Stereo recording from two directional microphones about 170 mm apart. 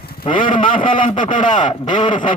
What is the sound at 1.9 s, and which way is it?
Speech, 30° left (ahead or behind).